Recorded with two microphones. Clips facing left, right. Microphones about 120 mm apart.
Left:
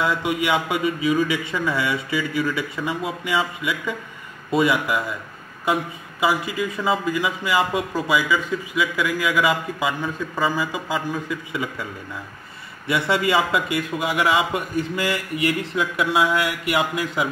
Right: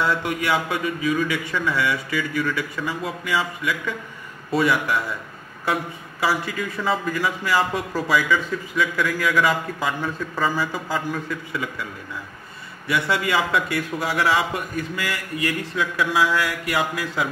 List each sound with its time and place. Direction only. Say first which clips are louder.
0.0 s speech: left 1 dB; 10° left (ahead or behind)
6.2 s speech: left 2 dB; 15° left (ahead or behind)
12.8 s speech: left 2 dB; 25° left (ahead or behind)